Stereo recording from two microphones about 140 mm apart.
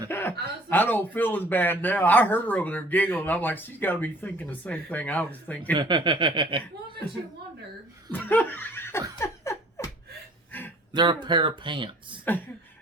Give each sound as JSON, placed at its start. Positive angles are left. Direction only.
{"t": 0.1, "sound": "speech", "side_deg": 15}
{"t": 5.7, "sound": "speech", "side_deg": -30}
{"t": 8.1, "sound": "laughter", "side_deg": 15}
{"t": 10.9, "sound": "speech", "side_deg": -30}